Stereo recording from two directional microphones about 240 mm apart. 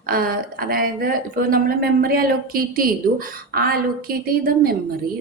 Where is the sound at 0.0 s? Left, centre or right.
Right.